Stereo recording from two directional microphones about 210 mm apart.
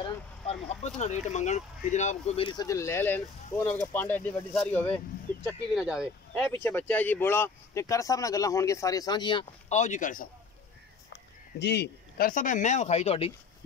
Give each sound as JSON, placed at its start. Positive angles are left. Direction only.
{"t": 0.0, "sound": "speech", "side_deg": 30}
{"t": 6.5, "sound": "speech", "side_deg": 10}
{"t": 11.6, "sound": "speech", "side_deg": 50}